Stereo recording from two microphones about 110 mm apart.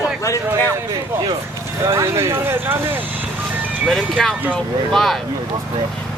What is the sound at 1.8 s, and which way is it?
Speech, 25° right (ahead or behind).